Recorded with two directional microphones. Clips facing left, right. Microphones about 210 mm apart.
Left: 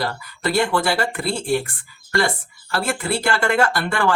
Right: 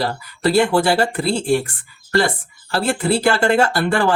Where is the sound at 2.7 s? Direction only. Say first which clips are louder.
Right 5 dB; 30° right (ahead or behind).